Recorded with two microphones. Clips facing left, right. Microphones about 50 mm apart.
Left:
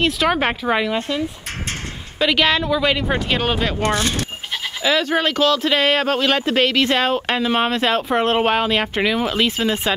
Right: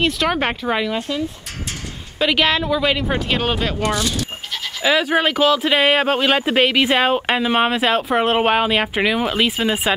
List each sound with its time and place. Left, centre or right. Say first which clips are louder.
0.0 s speech: left 1 dB; centre
2.1 s speech: even; centre
3.8 s speech: left 1 dB; left
4.8 s speech: right 2 dB; centre